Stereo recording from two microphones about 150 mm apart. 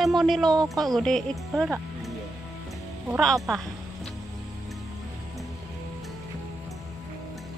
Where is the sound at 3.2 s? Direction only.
Centre (ahead or behind).